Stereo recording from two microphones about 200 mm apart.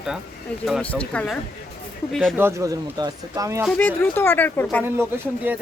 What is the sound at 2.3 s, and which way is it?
A woman's voice, 15° right (ahead or behind).